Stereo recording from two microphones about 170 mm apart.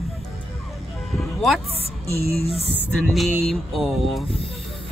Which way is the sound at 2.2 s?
65° right (ahead or behind).